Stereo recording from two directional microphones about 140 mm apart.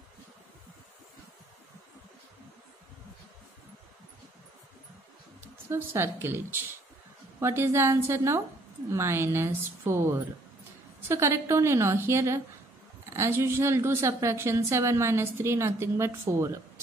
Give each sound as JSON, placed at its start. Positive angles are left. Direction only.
{"t": 5.4, "sound": "a woman's voice", "side_deg": -15}
{"t": 11.1, "sound": "a woman's voice", "side_deg": -20}